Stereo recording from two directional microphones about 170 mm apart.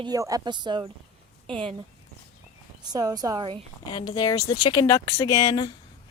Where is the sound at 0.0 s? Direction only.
20° right (ahead or behind).